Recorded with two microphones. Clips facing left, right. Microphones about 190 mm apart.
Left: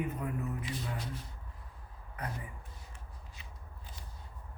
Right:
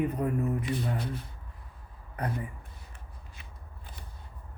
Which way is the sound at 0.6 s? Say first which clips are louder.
Right 8 dB; 60° right (ahead or behind).